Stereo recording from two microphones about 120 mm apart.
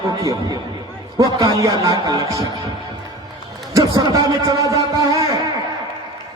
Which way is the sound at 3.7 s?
30° right (ahead or behind).